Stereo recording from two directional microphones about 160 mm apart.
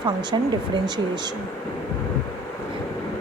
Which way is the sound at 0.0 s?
30° right (ahead or behind).